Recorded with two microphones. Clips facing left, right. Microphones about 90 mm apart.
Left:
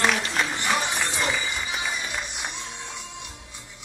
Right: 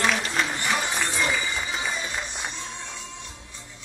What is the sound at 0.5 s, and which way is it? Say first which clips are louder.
Music: left 1 dB; 20° left (ahead or behind).